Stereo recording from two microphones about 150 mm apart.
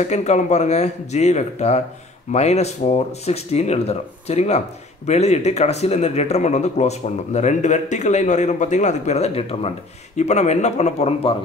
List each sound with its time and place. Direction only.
0.0 s speech: 50° left (ahead or behind)